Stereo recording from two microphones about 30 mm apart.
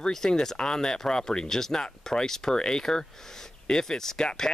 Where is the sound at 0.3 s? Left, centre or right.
Left.